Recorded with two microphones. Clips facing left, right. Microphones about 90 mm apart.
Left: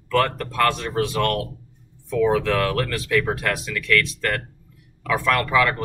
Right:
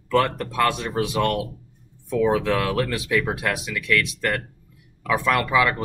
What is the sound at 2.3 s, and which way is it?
Speech, 15° right (ahead or behind).